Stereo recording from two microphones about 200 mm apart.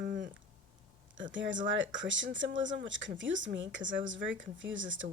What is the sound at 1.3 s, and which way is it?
A woman's voice, 65° right (ahead or behind).